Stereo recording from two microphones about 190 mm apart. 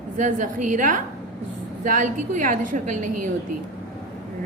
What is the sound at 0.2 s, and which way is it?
A woman's voice, 40° right (ahead or behind).